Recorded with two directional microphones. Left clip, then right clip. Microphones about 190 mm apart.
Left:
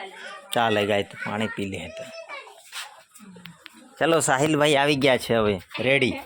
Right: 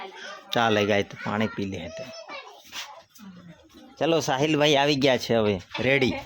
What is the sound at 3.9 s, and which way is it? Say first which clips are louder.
Speech: left 3 dB; 15° right (ahead or behind).